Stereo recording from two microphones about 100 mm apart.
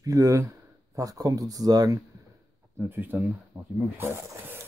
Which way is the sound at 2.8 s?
20° right (ahead or behind).